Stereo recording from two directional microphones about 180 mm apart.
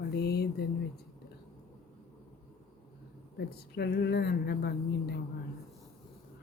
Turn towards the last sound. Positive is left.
turn(degrees=65)  # may be behind; listen again after turning